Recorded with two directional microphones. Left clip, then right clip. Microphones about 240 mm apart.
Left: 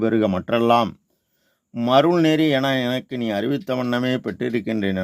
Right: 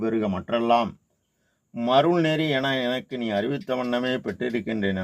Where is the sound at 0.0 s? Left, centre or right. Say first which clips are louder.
Left 6 dB; left.